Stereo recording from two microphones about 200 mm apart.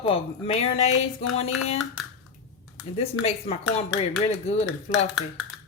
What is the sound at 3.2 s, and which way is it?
Speech, 30° left (ahead or behind).